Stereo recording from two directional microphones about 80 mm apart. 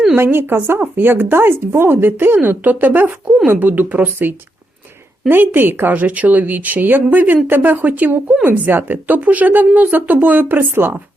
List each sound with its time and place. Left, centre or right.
0.2 s speech: right